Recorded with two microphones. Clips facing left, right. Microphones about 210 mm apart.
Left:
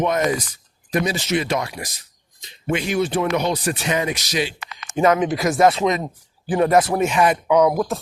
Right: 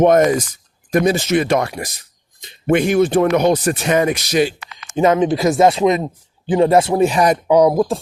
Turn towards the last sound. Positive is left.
turn(degrees=-30)  # may be behind; listen again after turning